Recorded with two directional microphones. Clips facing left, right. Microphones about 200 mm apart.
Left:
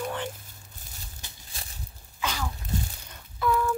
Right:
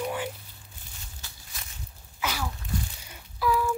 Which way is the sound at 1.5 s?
30° left (ahead or behind).